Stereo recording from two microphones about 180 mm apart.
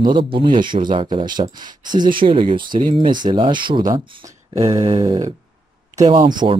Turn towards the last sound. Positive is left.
turn(degrees=-25)  # may be behind; listen again after turning